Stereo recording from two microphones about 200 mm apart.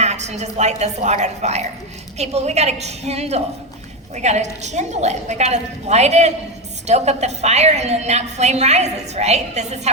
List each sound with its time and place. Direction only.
0.0 s a woman's voice: 35° right (ahead or behind)